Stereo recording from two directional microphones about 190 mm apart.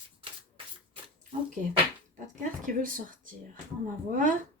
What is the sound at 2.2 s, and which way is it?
Speech, 45° right (ahead or behind).